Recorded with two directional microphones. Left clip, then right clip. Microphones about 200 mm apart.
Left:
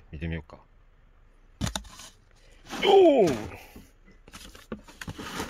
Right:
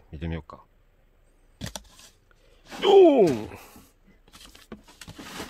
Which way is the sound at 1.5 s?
5° left (ahead or behind).